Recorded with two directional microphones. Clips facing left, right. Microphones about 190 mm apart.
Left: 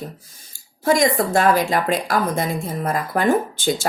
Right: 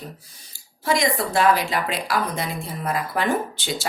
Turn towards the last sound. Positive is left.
turn(degrees=50)  # may be behind; listen again after turning